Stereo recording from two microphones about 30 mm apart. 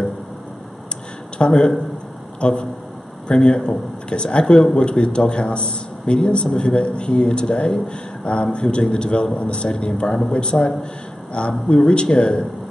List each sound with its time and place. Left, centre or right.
1.4 s a man's voice: left